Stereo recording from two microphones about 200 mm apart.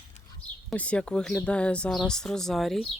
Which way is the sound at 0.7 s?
5° left (ahead or behind).